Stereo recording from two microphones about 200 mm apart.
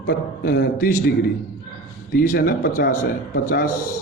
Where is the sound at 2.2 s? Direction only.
45° left (ahead or behind).